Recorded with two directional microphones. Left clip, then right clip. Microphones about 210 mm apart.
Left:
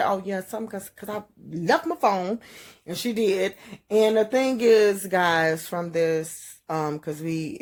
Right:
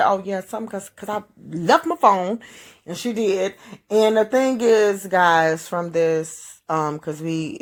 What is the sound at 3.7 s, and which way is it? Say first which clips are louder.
Speech: right 3 dB; 10° left (ahead or behind).